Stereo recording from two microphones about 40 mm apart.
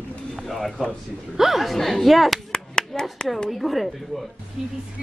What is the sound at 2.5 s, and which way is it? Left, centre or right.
Clapping, centre.